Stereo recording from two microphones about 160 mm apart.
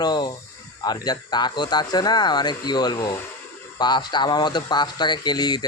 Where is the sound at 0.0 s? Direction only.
25° left (ahead or behind).